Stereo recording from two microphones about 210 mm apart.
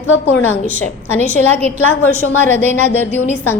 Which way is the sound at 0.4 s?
10° left (ahead or behind).